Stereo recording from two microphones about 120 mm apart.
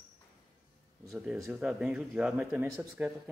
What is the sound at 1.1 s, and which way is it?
Speech, 5° right (ahead or behind).